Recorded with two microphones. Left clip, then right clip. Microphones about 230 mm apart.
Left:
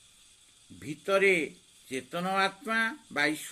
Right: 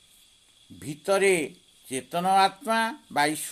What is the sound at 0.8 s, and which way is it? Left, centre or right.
Speech, right.